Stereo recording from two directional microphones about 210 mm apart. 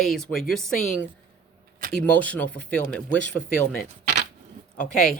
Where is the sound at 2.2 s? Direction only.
5° left (ahead or behind).